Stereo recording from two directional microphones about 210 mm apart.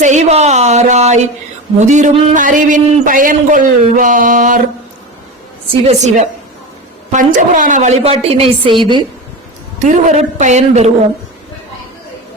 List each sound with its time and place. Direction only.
0.0 s a sound: 35° right (ahead or behind)
1.8 s a man's voice: 35° right (ahead or behind)
5.9 s a man's voice: 35° right (ahead or behind)
9.8 s a man's voice: 35° right (ahead or behind)